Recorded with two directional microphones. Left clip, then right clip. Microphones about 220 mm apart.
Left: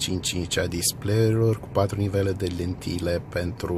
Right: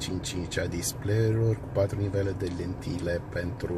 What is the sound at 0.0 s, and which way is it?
Speech, 45° left (ahead or behind).